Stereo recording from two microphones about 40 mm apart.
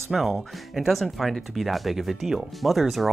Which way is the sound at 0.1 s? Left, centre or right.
Centre.